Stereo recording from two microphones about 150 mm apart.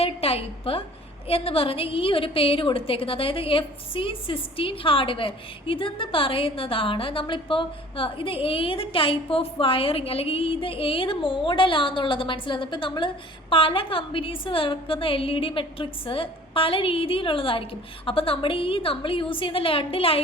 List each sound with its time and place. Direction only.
0.0 s a woman's voice: 40° left (ahead or behind)